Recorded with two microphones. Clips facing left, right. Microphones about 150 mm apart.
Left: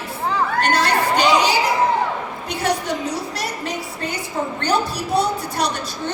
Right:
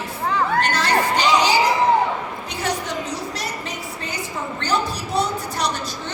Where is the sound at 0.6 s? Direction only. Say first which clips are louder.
Left 2 dB; 60° left (ahead or behind).